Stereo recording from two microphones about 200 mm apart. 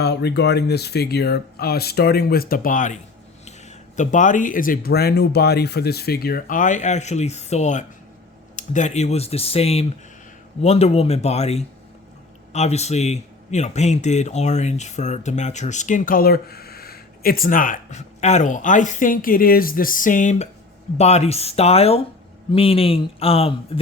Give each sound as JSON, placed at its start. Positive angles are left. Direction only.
{"t": 0.0, "sound": "a man's voice", "side_deg": 55}